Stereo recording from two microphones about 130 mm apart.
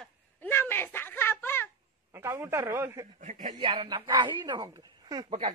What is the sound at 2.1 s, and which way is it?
Speech, 20° right (ahead or behind).